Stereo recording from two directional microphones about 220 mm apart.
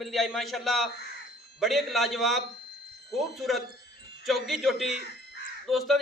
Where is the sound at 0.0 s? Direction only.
Centre (ahead or behind).